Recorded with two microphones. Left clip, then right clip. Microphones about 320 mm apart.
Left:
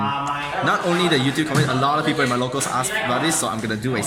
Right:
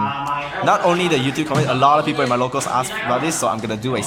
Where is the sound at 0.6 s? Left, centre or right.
Centre.